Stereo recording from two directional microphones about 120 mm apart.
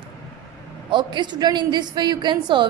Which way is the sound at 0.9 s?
40° right (ahead or behind).